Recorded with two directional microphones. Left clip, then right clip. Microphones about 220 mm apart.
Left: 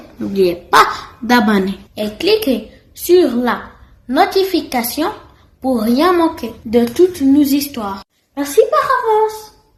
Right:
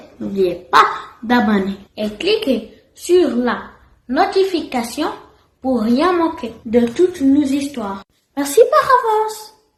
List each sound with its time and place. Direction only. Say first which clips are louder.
0.3 s a child's voice: left 2 dB; 50° left (ahead or behind)
8.4 s a child's voice: right 1 dB; 45° right (ahead or behind)